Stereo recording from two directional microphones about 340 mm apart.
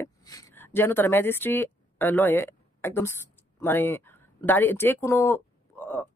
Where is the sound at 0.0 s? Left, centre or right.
Centre.